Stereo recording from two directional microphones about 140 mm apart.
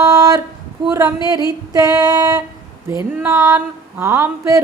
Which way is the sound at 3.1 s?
15° right (ahead or behind).